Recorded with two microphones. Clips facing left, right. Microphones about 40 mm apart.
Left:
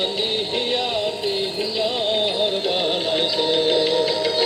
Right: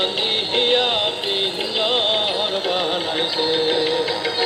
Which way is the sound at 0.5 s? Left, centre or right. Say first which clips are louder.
Right 8 dB; right.